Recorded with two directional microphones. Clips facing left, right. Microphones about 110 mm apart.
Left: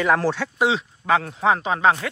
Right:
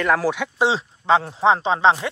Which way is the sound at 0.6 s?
30° right (ahead or behind).